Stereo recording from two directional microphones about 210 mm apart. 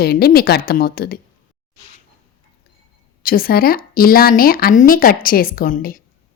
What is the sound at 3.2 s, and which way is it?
A woman's voice, 45° left (ahead or behind).